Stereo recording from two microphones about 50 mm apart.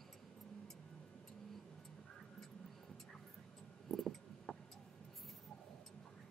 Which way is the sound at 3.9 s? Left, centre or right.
Centre.